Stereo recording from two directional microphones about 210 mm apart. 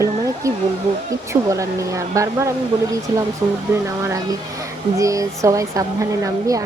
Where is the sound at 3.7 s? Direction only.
15° right (ahead or behind).